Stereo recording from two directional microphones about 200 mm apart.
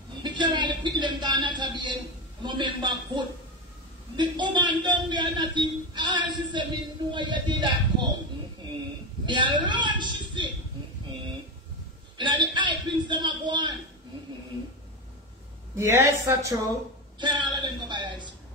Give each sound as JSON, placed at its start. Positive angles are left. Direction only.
{"t": 0.2, "sound": "a sound", "side_deg": -25}
{"t": 2.4, "sound": "a man's voice", "side_deg": -25}
{"t": 9.2, "sound": "a woman's voice", "side_deg": -25}
{"t": 12.2, "sound": "a man's voice", "side_deg": -20}
{"t": 15.7, "sound": "a woman's voice", "side_deg": -15}